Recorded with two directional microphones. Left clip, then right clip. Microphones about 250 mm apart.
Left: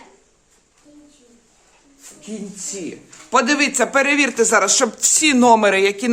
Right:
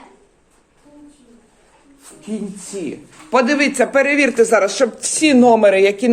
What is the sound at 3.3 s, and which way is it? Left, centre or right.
Speech, centre.